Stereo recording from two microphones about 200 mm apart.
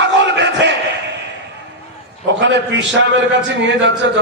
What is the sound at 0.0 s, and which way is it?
Battle cry, 60° right (ahead or behind).